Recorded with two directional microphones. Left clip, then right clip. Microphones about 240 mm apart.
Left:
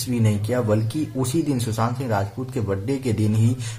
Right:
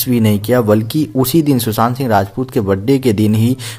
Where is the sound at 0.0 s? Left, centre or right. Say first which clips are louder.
Right 10 dB; right.